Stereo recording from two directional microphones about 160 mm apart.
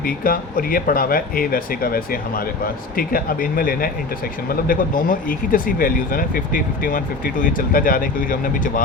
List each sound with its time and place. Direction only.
0.3 s speech: 60° left (ahead or behind)
3.0 s speech: 65° left (ahead or behind)